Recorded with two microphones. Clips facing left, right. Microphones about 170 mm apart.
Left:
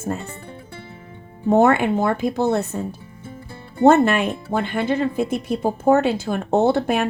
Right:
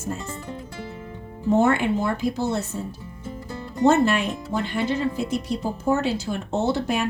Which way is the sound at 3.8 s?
55° left (ahead or behind).